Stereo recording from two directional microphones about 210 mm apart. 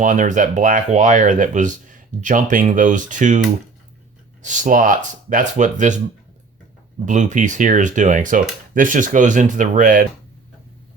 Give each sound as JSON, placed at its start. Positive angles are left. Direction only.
{"t": 0.0, "sound": "speech", "side_deg": -35}
{"t": 4.4, "sound": "speech", "side_deg": -35}
{"t": 7.0, "sound": "speech", "side_deg": -35}